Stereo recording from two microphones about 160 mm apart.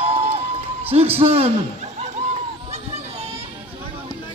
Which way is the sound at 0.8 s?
35° right (ahead or behind).